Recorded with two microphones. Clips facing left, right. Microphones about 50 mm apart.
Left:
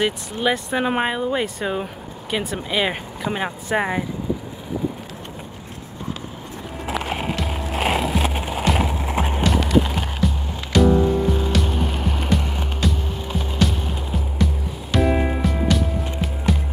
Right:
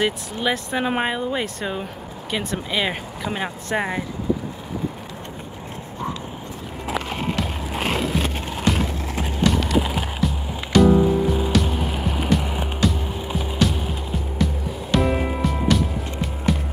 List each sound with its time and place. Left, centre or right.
0.0 s speech: centre
7.1 s a sound: centre
7.3 s skateboard: centre
9.0 s horse: left
9.4 s music: centre